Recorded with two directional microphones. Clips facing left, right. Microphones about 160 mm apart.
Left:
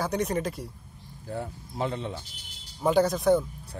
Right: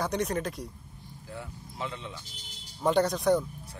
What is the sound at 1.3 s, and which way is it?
Speech, 40° left (ahead or behind).